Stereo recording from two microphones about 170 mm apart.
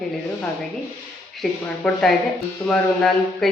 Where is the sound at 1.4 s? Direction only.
Centre (ahead or behind).